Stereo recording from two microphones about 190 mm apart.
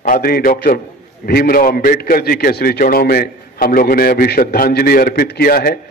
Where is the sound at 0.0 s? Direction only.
50° left (ahead or behind).